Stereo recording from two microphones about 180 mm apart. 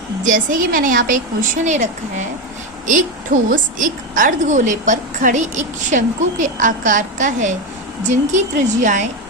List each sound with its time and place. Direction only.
0.3 s a woman's voice: 50° right (ahead or behind)
3.5 s a woman's voice: 45° right (ahead or behind)